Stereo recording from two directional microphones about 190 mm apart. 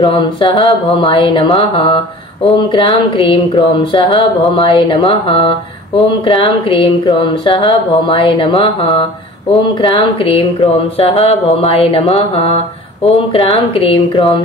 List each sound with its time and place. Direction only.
0.0 s speech: 25° left (ahead or behind)
11.6 s mantra: 30° left (ahead or behind)